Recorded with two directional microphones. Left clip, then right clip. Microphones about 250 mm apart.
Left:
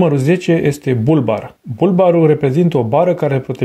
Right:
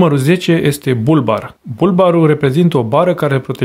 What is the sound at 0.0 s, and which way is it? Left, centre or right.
Speech, centre.